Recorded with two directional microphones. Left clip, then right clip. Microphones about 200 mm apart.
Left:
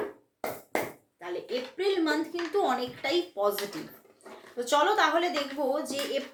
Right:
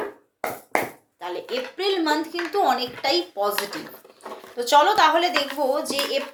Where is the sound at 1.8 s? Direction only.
Centre (ahead or behind).